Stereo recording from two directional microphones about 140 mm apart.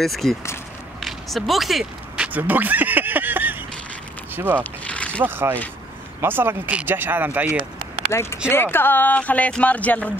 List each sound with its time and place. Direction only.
0.0 s speech: centre (ahead or behind)
4.8 s a sound: 10° left (ahead or behind)
5.2 s speech: 15° right (ahead or behind)
8.1 s speech: 20° left (ahead or behind)